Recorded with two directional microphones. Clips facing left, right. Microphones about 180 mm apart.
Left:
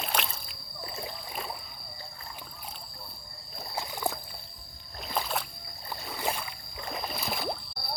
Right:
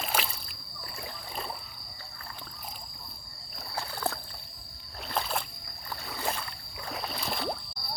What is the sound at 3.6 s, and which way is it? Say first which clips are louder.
Rowboat: left 1 dB; 15° left (ahead or behind).